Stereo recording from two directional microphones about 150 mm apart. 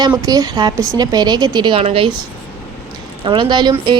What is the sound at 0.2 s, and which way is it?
Speech, 25° right (ahead or behind).